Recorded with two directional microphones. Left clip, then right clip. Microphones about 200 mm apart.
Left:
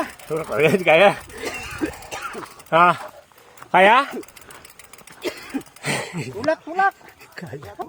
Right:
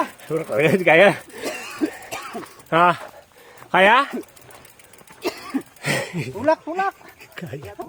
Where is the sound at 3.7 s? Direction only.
25° right (ahead or behind).